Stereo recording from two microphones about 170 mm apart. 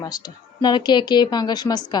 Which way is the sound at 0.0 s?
25° left (ahead or behind).